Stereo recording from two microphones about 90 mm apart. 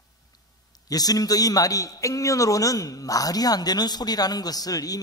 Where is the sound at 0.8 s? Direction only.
45° left (ahead or behind).